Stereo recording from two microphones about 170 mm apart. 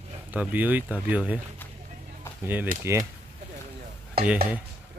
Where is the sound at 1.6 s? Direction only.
10° left (ahead or behind).